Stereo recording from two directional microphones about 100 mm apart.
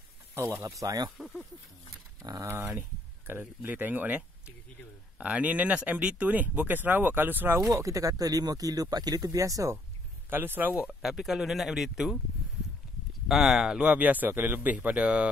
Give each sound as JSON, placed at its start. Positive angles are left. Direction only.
{"t": 0.3, "sound": "speech", "side_deg": -25}
{"t": 1.1, "sound": "speech", "side_deg": 0}
{"t": 2.4, "sound": "speech", "side_deg": -25}
{"t": 5.2, "sound": "speech", "side_deg": -15}
{"t": 7.7, "sound": "speech", "side_deg": -35}
{"t": 10.3, "sound": "speech", "side_deg": -20}
{"t": 10.7, "sound": "speech", "side_deg": 0}
{"t": 13.3, "sound": "speech", "side_deg": -5}